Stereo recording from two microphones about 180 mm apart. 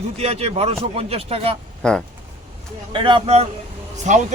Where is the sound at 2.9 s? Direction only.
30° right (ahead or behind).